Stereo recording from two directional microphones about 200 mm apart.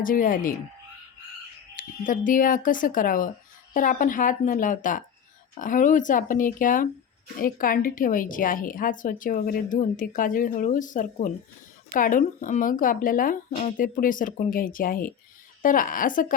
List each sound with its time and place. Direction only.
0.0 s a woman's voice: 45° left (ahead or behind)
1.7 s a woman's voice: 40° left (ahead or behind)